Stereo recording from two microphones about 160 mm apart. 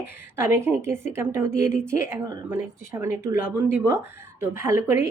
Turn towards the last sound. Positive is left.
turn(degrees=-15)  # may be behind; listen again after turning